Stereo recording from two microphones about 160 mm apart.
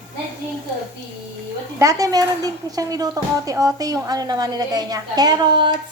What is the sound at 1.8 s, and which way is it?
Speech, 20° right (ahead or behind).